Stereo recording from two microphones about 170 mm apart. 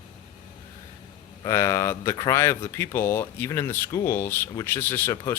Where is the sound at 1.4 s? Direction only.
15° left (ahead or behind).